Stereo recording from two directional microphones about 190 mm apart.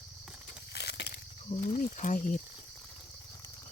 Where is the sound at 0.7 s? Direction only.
60° left (ahead or behind).